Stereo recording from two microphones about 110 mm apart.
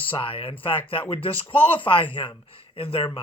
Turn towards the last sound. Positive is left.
turn(degrees=60)  # may be behind; listen again after turning